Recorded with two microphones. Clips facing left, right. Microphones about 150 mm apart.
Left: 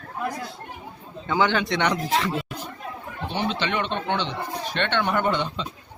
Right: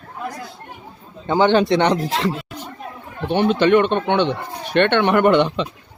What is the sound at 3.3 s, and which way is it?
Speech, 55° right (ahead or behind).